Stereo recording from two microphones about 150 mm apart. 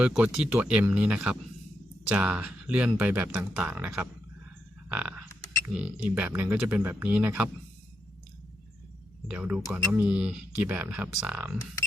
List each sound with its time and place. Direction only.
0.0 s speech: 5° right (ahead or behind)
4.9 s a sound: 10° right (ahead or behind)
5.6 s speech: 10° right (ahead or behind)
9.2 s speech: 5° right (ahead or behind)